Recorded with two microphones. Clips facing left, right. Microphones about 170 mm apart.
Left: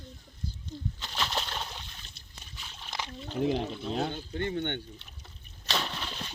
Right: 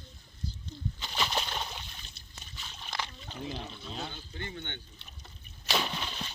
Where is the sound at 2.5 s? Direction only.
5° left (ahead or behind).